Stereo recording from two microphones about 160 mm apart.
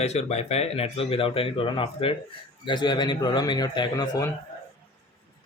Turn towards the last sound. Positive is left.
turn(degrees=25)  # may be behind; listen again after turning